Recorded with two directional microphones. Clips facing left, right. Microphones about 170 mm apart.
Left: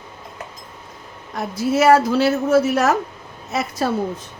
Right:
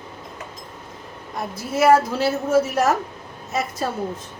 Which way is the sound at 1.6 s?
85° left.